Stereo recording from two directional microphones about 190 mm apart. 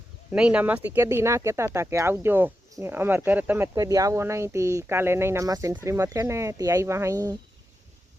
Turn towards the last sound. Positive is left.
turn(degrees=-20)  # may be behind; listen again after turning